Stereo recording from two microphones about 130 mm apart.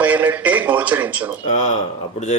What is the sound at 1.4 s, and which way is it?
Speech, 70° left (ahead or behind).